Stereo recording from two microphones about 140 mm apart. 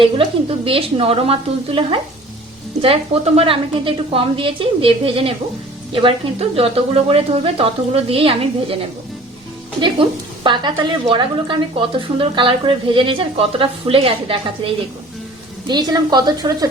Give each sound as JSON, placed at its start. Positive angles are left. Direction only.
{"t": 0.0, "sound": "a woman's voice", "side_deg": -40}
{"t": 9.8, "sound": "a woman's voice", "side_deg": -35}